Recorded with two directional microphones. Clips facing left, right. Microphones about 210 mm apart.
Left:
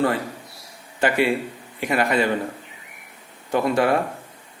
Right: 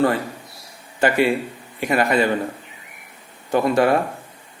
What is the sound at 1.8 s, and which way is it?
Speech, 40° right (ahead or behind).